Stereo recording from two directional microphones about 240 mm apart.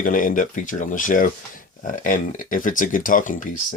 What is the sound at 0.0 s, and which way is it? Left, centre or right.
Speech, left.